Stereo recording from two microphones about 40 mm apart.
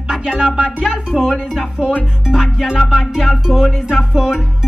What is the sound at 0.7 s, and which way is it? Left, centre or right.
Speech, right.